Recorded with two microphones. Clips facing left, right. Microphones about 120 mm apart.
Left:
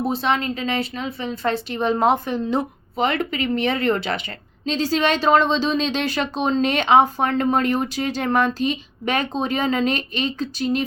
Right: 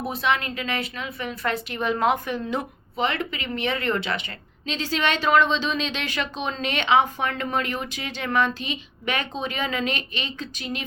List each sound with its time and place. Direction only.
0.1 s a woman's voice: 30° left (ahead or behind)